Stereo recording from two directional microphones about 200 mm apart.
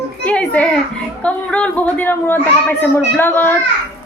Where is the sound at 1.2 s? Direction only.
5° left (ahead or behind).